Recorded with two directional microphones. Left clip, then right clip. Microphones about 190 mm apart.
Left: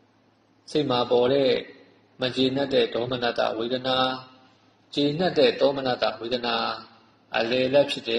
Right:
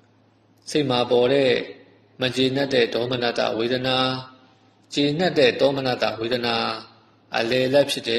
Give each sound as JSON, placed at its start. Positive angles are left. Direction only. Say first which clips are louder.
{"t": 0.7, "sound": "a man's voice", "louder": "right 2 dB", "side_deg": -45}